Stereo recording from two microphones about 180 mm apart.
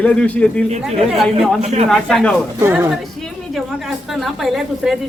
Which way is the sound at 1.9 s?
5° left (ahead or behind).